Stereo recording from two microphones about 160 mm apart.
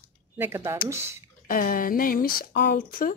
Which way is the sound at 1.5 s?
60° left (ahead or behind).